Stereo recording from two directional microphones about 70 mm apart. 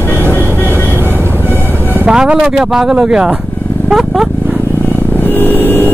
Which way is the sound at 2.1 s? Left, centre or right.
Centre.